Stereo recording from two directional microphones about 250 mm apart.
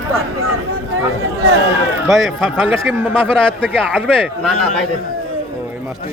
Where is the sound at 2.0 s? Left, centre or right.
Centre.